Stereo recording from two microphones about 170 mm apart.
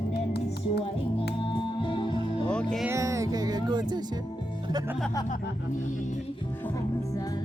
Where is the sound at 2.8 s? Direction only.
15° right (ahead or behind).